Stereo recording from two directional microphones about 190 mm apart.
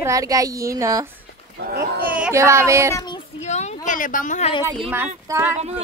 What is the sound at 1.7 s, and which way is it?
Speech, 55° right (ahead or behind).